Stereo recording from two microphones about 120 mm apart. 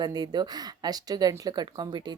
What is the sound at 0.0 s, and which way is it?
Speech, 35° right (ahead or behind).